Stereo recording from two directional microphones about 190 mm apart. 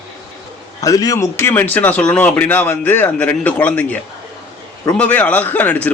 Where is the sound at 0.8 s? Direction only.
20° left (ahead or behind).